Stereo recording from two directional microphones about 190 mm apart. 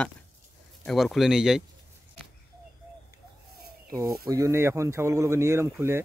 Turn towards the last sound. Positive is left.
turn(degrees=-15)  # may be behind; listen again after turning